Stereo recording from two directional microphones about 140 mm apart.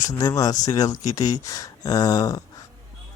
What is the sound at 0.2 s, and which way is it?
Speech, 25° left (ahead or behind).